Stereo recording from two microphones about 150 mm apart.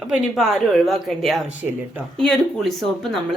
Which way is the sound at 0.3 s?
Centre (ahead or behind).